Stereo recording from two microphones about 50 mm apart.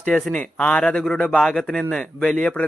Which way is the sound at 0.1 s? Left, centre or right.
Centre.